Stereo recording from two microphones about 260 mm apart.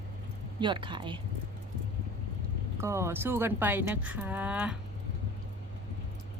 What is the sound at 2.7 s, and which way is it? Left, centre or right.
Speech, centre.